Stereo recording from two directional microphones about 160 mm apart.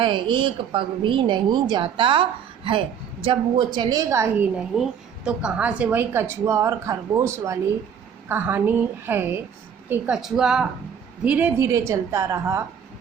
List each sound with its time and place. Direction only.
0.0 s a woman's voice: 30° right (ahead or behind)
3.2 s a woman's voice: 35° right (ahead or behind); by 4.4 s 15° right (ahead or behind)
4.5 s a woman's voice: 5° right (ahead or behind)